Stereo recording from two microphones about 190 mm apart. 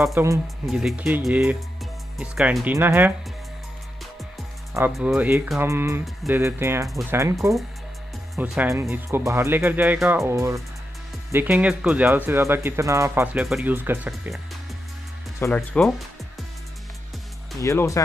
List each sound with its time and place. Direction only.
0.1 s speech: 15° right (ahead or behind)
0.7 s speech: centre (ahead or behind)
4.9 s speech: 5° right (ahead or behind)
8.4 s speech: 10° right (ahead or behind)
15.4 s speech: 5° left (ahead or behind)
17.6 s speech: 15° left (ahead or behind)